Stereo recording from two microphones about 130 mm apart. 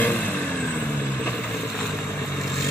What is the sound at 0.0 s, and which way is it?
Vehicle, 10° left (ahead or behind).